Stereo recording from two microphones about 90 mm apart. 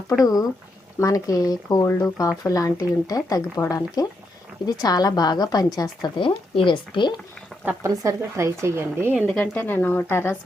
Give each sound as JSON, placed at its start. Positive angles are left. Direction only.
{"t": 0.1, "sound": "speech", "side_deg": 20}
{"t": 0.9, "sound": "a woman's voice", "side_deg": 40}
{"t": 6.1, "sound": "speech", "side_deg": 70}
{"t": 7.8, "sound": "speech", "side_deg": -35}
{"t": 9.4, "sound": "speech", "side_deg": 20}